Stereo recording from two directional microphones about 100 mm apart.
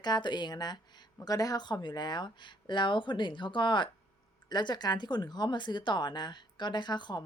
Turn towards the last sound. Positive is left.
turn(degrees=45)  # may be behind; listen again after turning